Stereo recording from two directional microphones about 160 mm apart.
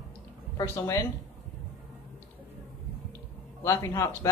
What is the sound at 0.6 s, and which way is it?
Speech, 15° left (ahead or behind).